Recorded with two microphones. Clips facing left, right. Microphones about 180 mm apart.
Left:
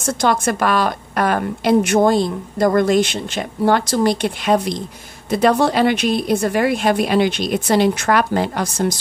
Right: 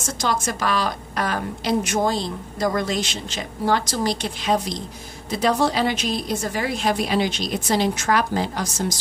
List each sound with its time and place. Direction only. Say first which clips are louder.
0.0 s a woman's voice: left 7 dB; 60° left (ahead or behind)